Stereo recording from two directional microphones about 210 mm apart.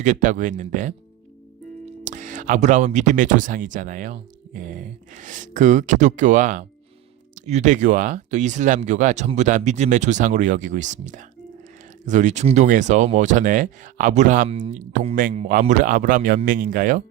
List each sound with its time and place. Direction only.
0.0 s speech: 35° right (ahead or behind)
2.0 s speech: 35° right (ahead or behind)